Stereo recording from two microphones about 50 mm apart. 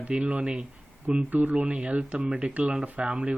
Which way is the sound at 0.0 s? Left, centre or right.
Right.